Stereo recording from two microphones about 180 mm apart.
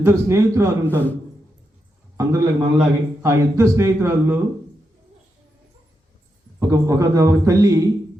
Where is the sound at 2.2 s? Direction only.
15° right (ahead or behind).